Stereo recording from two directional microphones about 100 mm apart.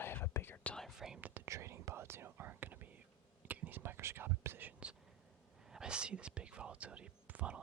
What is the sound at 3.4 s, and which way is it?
Speech, 15° right (ahead or behind).